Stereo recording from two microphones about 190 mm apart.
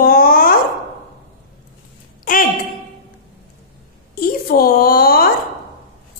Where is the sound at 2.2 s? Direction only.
45° left (ahead or behind).